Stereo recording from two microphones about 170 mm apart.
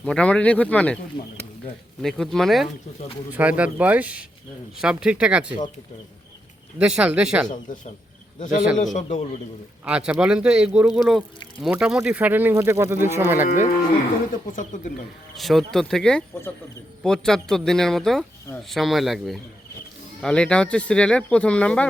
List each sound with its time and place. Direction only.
0.0 s speech: 5° left (ahead or behind)
2.0 s speech: centre (ahead or behind)
6.7 s speech: 5° right (ahead or behind)
8.4 s a man's voice: 50° left (ahead or behind)
9.8 s speech: 5° right (ahead or behind)
14.5 s a man's voice: 50° left (ahead or behind)
15.4 s speech: centre (ahead or behind)